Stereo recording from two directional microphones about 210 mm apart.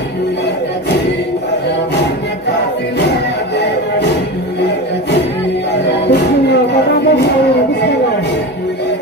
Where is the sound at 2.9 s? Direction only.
55° left (ahead or behind).